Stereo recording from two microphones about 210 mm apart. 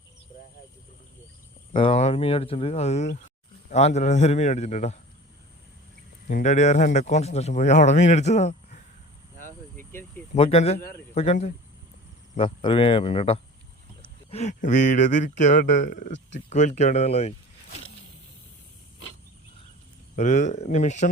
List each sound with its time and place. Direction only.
1.7 s speech: 25° left (ahead or behind)
6.2 s speech: 40° left (ahead or behind)
9.7 s a sound: 10° left (ahead or behind)
10.3 s speech: 30° left (ahead or behind)
20.1 s speech: 35° left (ahead or behind)